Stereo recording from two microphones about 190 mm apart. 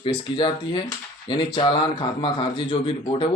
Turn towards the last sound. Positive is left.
turn(degrees=25)  # may be behind; listen again after turning